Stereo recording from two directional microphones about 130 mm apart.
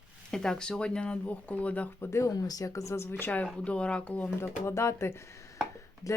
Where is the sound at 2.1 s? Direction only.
20° left (ahead or behind).